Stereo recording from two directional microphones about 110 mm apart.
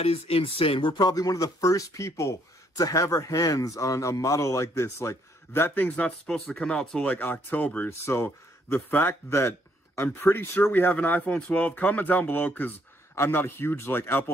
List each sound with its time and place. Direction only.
0.0 s speech: 65° left (ahead or behind); by 14.3 s 20° left (ahead or behind)